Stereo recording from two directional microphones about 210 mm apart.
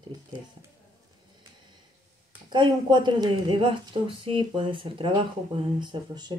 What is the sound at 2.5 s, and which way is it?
A woman's voice, 20° right (ahead or behind).